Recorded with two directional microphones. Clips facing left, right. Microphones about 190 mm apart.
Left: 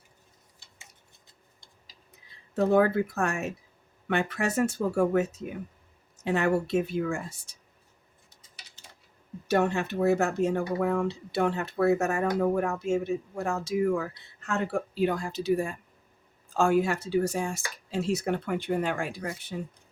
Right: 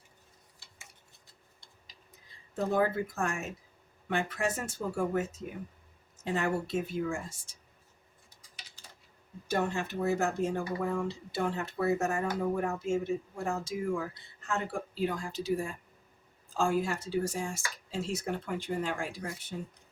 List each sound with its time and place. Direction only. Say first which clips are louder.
2.6 s speech: left 6 dB; 65° left (ahead or behind)
6.2 s speech: left 6 dB; 65° left (ahead or behind)
8.4 s cutlery: right 1 dB; 25° left (ahead or behind)
9.5 s speech: left 6 dB; 70° left (ahead or behind)